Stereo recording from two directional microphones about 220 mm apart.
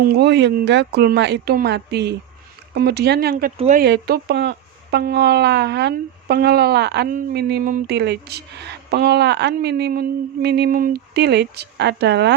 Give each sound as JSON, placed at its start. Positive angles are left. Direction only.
{"t": 0.0, "sound": "speech", "side_deg": -45}